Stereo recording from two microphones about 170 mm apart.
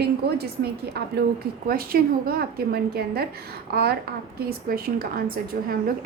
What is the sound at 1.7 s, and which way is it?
A woman's voice, 60° right (ahead or behind).